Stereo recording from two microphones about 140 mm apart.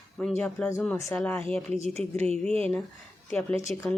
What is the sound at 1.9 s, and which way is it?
Speech, 50° right (ahead or behind).